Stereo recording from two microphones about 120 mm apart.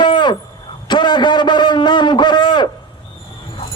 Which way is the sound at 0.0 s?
40° left (ahead or behind).